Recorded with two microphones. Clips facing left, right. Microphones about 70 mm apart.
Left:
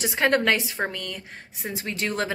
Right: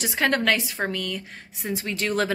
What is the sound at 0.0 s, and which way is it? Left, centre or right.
A woman's voice, centre.